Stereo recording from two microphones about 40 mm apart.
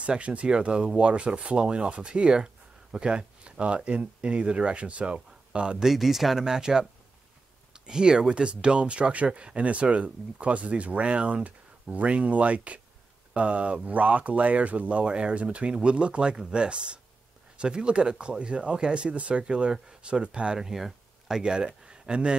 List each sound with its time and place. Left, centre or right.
0.0 s speech: right
5.8 s speech: centre
6.4 s speech: centre
20.5 s speech: centre
21.4 s speech: right